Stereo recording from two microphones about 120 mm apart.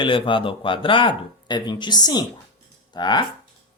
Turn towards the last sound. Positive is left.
turn(degrees=35)  # may be behind; listen again after turning